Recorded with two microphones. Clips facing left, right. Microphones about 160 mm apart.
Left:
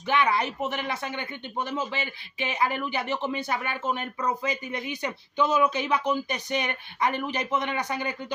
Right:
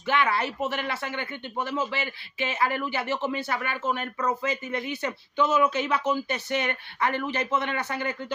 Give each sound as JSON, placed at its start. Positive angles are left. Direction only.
{"t": 0.0, "sound": "speech", "side_deg": 15}